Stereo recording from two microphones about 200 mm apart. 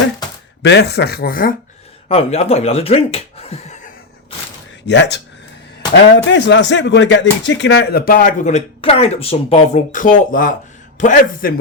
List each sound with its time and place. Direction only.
0.6 s speech: 60° left (ahead or behind)
2.0 s speech: 30° left (ahead or behind)
4.9 s speech: 60° left (ahead or behind)
6.3 s speech: 60° left (ahead or behind); by 11.6 s 45° left (ahead or behind)